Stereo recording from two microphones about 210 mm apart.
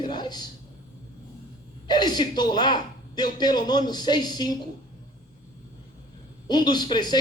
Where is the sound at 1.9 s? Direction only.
20° left (ahead or behind).